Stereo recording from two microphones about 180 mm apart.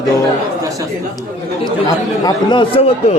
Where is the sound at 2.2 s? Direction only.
25° left (ahead or behind).